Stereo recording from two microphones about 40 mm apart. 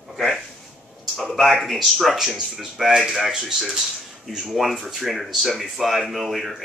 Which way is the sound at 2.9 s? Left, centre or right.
Centre.